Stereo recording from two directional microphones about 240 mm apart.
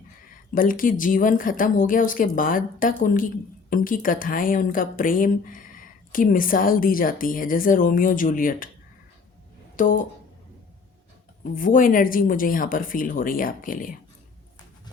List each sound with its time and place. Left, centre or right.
0.5 s speech: left
9.7 s speech: left
11.5 s speech: left